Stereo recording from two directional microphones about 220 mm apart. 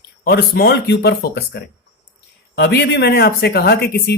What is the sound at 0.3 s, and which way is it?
Speech, 45° left (ahead or behind).